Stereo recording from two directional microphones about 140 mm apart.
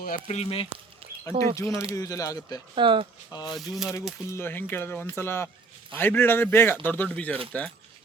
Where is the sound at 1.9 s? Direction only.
25° left (ahead or behind).